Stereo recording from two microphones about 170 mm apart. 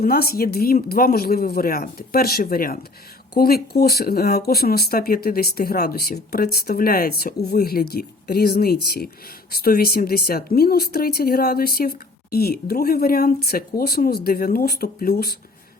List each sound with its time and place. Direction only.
0.0 s speech: 60° left (ahead or behind)